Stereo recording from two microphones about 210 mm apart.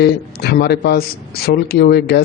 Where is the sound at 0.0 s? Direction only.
50° left (ahead or behind).